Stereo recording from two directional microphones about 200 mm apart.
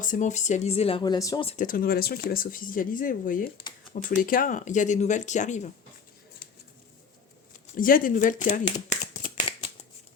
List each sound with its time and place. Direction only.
0.0 s speech: 40° left (ahead or behind); by 1.5 s 20° left (ahead or behind)
1.5 s speech: 40° left (ahead or behind)
7.8 s speech: 45° left (ahead or behind)
8.4 s shuffling cards: 35° left (ahead or behind)